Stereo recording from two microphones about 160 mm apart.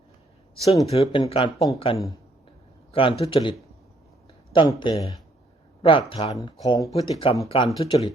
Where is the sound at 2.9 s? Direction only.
35° left (ahead or behind).